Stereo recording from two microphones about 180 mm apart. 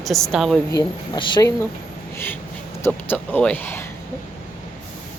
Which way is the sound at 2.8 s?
10° left (ahead or behind).